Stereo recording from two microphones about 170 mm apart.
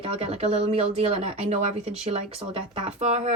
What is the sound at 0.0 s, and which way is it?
Speech, 35° right (ahead or behind).